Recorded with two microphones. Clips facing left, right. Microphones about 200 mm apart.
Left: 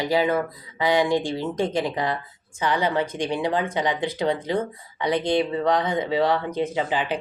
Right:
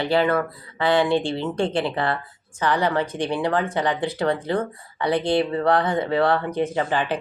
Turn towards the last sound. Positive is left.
turn(degrees=15)  # may be behind; listen again after turning